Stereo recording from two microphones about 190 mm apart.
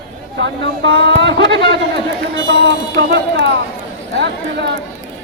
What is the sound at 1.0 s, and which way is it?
Speech, 65° right (ahead or behind).